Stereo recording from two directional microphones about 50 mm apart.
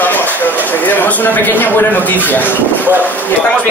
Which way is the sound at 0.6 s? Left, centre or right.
Left.